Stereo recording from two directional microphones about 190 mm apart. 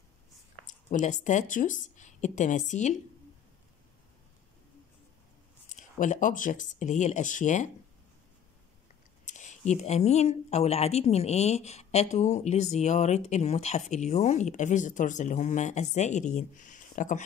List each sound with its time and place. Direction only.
0.7 s speech: 40° left (ahead or behind)
5.7 s speech: 40° left (ahead or behind)
9.2 s speech: 40° left (ahead or behind)